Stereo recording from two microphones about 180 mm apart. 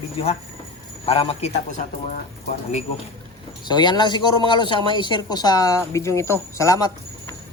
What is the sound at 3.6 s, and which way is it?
Speech, 25° left (ahead or behind).